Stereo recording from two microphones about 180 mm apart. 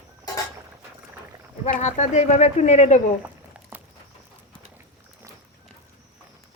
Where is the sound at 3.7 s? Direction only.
10° right (ahead or behind).